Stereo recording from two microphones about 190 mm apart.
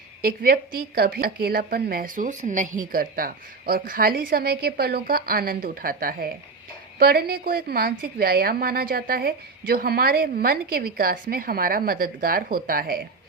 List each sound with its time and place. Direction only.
0.2 s a woman's voice: 50° right (ahead or behind)